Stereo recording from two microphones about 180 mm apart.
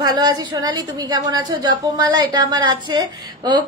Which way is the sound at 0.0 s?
20° right (ahead or behind).